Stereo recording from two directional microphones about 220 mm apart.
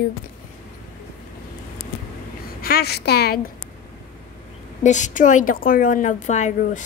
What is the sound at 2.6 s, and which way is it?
Speech, 45° left (ahead or behind).